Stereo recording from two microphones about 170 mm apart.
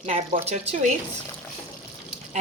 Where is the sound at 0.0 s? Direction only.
40° right (ahead or behind).